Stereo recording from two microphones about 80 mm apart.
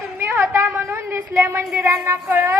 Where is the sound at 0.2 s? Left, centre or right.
Right.